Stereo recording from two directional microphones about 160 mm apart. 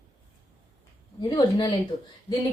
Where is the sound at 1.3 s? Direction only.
25° left (ahead or behind).